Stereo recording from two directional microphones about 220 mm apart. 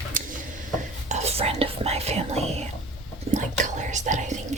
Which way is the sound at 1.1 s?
30° right (ahead or behind).